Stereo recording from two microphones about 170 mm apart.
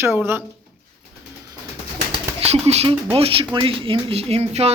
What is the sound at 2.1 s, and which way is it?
Speech, 40° right (ahead or behind).